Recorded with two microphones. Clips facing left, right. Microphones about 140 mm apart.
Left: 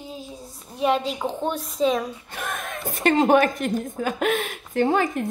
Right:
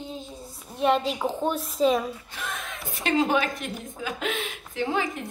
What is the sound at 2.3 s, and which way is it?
A woman's voice, 50° left (ahead or behind).